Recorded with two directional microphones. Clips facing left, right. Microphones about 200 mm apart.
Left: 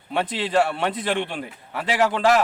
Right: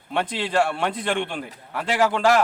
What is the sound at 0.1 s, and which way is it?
A man's voice, centre (ahead or behind).